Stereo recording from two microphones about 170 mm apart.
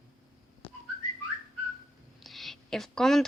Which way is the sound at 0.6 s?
10° left (ahead or behind).